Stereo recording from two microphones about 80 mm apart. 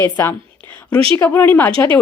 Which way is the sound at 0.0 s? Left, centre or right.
Left.